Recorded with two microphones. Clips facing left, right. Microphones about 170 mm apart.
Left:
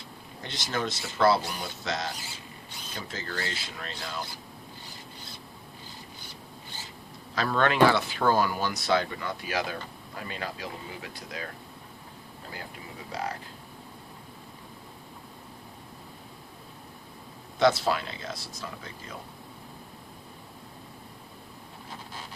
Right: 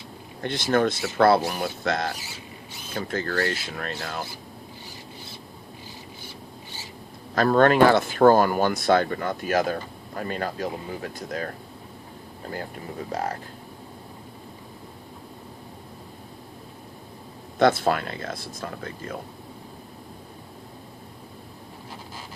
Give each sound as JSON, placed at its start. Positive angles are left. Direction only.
{"t": 0.4, "sound": "speech", "side_deg": -55}
{"t": 7.3, "sound": "speech", "side_deg": -45}
{"t": 12.5, "sound": "speech", "side_deg": -45}
{"t": 17.6, "sound": "speech", "side_deg": -55}